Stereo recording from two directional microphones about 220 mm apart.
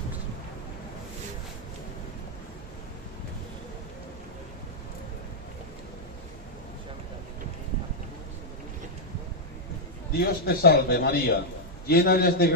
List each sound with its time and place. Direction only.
10.1 s a man's voice: 45° left (ahead or behind)